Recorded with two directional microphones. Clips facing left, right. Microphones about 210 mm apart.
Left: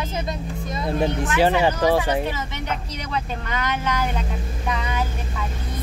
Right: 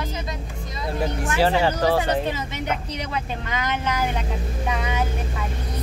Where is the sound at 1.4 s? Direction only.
15° left (ahead or behind).